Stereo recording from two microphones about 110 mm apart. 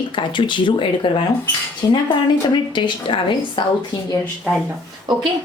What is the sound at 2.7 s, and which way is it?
Speech, 45° left (ahead or behind).